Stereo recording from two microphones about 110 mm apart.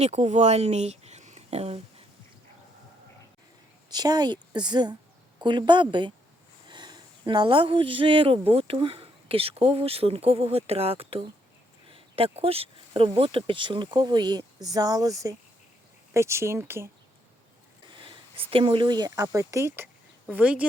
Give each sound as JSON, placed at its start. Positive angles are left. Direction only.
{"t": 0.0, "sound": "speech", "side_deg": -85}
{"t": 3.8, "sound": "a woman's voice", "side_deg": -40}
{"t": 17.9, "sound": "speech", "side_deg": -50}
{"t": 20.3, "sound": "speech", "side_deg": -10}